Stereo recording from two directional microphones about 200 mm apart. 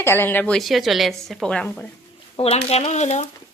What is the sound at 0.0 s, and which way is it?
Speech, 10° left (ahead or behind).